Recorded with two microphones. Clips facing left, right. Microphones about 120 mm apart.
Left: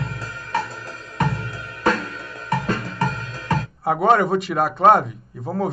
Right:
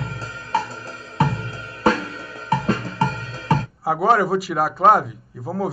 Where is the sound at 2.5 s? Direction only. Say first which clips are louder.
Right 2 dB; 35° right (ahead or behind).